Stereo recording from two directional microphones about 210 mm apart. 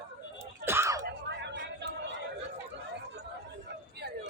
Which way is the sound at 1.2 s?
60° right (ahead or behind).